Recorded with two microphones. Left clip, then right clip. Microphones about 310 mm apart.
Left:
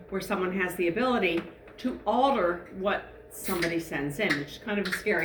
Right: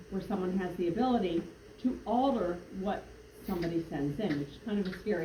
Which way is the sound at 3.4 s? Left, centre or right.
Left.